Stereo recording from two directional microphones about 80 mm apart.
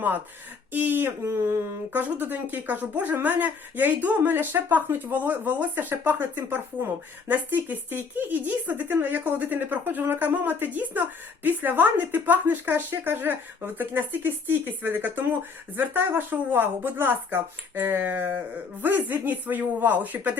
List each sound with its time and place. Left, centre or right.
0.7 s speech: right